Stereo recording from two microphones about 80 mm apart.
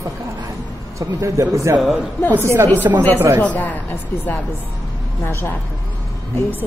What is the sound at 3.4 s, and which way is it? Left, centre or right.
A woman's voice, left.